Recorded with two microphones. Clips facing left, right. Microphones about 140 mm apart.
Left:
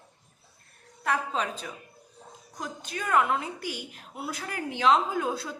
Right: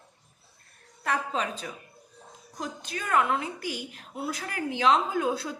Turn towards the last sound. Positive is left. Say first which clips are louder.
# right 2 dB
turn(degrees=0)  # may be behind; listen again after turning